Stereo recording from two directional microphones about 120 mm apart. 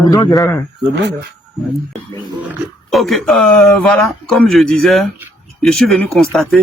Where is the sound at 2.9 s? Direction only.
Centre (ahead or behind).